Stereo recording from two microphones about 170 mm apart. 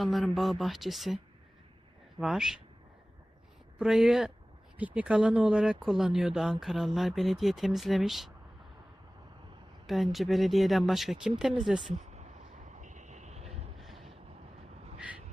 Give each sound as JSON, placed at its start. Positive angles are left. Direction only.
{"t": 0.0, "sound": "speech", "side_deg": 0}
{"t": 3.8, "sound": "speech", "side_deg": 0}
{"t": 9.8, "sound": "speech", "side_deg": 0}
{"t": 11.9, "sound": "vehicle", "side_deg": -45}